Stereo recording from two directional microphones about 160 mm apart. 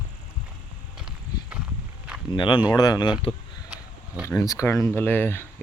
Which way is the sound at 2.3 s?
30° left (ahead or behind).